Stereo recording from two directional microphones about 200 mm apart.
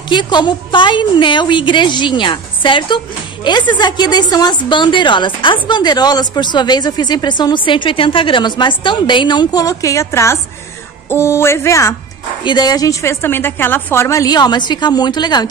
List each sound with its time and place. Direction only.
0.1 s a woman's voice: 20° left (ahead or behind)